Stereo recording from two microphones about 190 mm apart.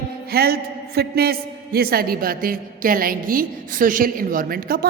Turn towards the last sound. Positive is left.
turn(degrees=-50)  # may be behind; listen again after turning